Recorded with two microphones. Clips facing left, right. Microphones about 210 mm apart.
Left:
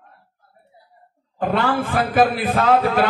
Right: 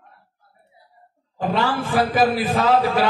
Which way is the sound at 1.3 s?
55° left (ahead or behind).